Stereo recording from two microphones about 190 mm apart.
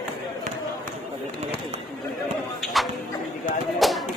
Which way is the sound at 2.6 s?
Centre (ahead or behind).